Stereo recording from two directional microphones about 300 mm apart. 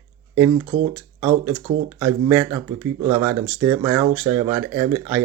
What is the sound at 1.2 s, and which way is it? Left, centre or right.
Speech, centre.